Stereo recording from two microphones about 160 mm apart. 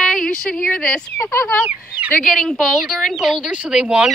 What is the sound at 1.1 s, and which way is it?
Speech, 20° left (ahead or behind).